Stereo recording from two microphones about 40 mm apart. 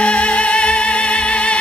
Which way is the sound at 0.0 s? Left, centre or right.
Left.